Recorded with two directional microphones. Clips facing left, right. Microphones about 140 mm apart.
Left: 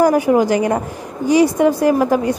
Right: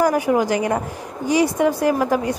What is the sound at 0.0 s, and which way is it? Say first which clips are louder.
A woman's voice: left 4 dB; 30° left (ahead or behind).